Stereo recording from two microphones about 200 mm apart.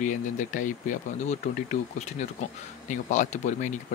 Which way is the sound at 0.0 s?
40° left (ahead or behind).